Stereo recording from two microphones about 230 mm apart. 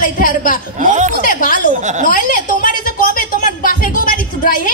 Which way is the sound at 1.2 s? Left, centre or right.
Left.